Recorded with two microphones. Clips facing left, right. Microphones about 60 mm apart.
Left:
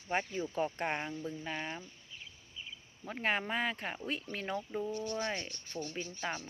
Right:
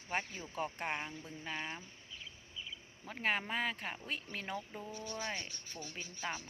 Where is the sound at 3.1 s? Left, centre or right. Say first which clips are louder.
Left 2 dB; centre.